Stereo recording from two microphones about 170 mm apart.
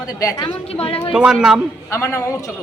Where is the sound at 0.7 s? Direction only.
35° left (ahead or behind).